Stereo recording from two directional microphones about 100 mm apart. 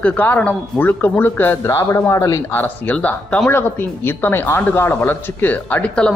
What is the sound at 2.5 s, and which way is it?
Speech, 15° left (ahead or behind).